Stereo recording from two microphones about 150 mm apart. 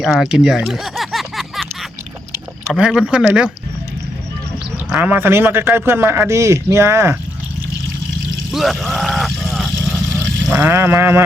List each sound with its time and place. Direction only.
0.0 s a sound: centre (ahead or behind)
2.7 s speech: 5° right (ahead or behind)
4.9 s a man's voice: 10° right (ahead or behind)
8.5 s vehicle: centre (ahead or behind)
10.6 s a man's voice: 15° right (ahead or behind)